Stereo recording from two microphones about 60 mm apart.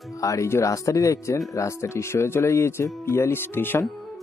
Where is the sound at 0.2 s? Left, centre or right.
Left.